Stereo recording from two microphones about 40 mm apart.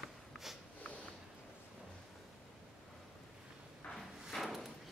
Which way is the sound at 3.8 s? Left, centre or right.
Left.